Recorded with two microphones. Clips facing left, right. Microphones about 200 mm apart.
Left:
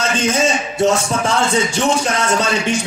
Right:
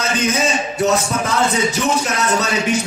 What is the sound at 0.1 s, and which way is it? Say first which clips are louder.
Speech: left 1 dB; 30° left (ahead or behind).